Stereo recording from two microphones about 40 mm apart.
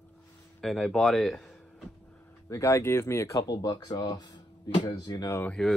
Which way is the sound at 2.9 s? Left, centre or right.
Left.